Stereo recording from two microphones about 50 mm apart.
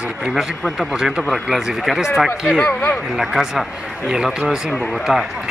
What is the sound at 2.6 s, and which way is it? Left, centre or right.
Speech, left.